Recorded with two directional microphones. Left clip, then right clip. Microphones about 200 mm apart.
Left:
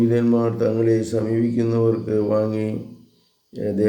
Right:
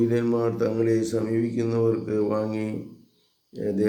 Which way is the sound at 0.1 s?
5° left (ahead or behind).